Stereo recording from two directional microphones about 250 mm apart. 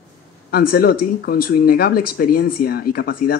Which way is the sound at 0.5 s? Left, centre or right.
Left.